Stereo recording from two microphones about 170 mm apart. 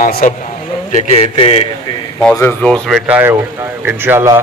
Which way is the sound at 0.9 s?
35° left (ahead or behind).